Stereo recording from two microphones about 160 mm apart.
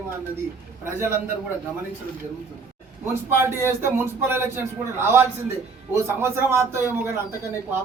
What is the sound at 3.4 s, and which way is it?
Speech, 15° right (ahead or behind).